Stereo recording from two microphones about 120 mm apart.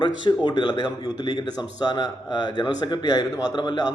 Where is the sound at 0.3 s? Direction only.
35° left (ahead or behind).